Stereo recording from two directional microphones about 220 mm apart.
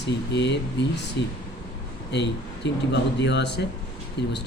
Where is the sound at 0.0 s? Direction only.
50° left (ahead or behind).